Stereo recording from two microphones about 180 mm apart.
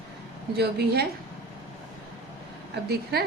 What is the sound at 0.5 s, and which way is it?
Speech, 65° right (ahead or behind).